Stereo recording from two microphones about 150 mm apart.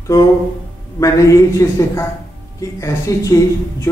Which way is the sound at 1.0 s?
20° left (ahead or behind).